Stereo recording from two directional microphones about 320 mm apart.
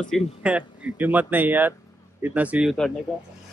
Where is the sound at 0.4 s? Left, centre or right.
Centre.